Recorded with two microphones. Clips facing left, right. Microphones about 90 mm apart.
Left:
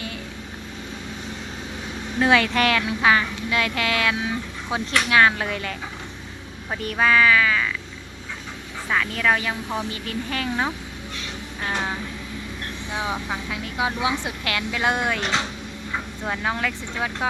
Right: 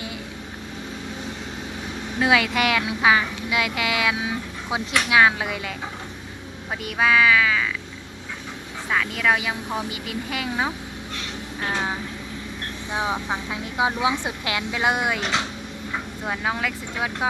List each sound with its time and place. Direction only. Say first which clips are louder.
2.1 s speech: left 1 dB; 5° right (ahead or behind)
6.8 s speech: left 1 dB; 5° right (ahead or behind)
8.9 s speech: even; 5° right (ahead or behind)
11.6 s vehicle: even; 10° right (ahead or behind)
12.9 s speech: right 2 dB; 20° right (ahead or behind)